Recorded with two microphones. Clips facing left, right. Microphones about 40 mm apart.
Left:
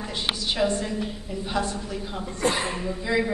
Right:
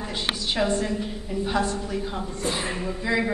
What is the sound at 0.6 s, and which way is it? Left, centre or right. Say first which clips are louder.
Speech: even; centre.